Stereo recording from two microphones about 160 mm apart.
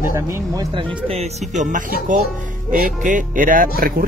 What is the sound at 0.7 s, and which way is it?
Speech, 40° right (ahead or behind).